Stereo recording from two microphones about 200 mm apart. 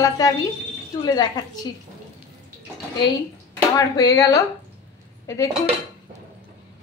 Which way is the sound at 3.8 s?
20° left (ahead or behind).